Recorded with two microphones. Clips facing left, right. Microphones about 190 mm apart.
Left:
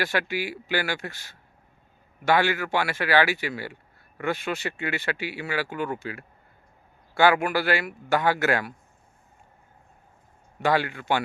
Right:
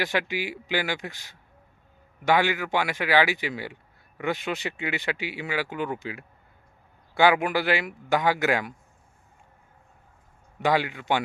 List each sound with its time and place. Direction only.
0.0 s speech: 15° right (ahead or behind)
10.6 s speech: 15° right (ahead or behind)